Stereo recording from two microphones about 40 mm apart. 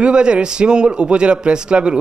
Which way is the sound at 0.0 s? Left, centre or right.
Right.